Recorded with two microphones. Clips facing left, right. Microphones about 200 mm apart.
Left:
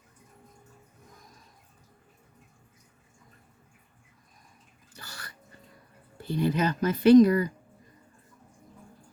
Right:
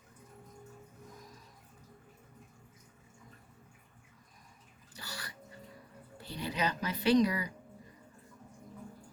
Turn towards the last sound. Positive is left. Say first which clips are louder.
# left 10 dB
turn(degrees=50)  # may be behind; listen again after turning